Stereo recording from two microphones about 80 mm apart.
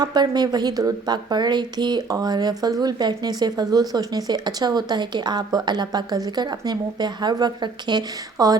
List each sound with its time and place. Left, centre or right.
0.0 s a woman's voice: right